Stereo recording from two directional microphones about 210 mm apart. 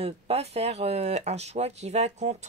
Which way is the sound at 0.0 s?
30° right (ahead or behind).